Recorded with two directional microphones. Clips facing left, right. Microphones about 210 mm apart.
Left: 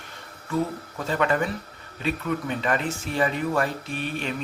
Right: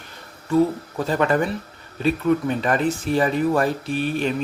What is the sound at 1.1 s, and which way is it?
Speech, 40° right (ahead or behind).